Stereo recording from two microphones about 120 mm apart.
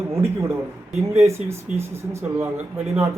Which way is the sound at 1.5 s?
20° right (ahead or behind).